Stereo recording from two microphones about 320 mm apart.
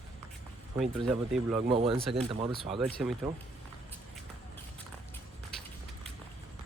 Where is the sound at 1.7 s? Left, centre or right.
Centre.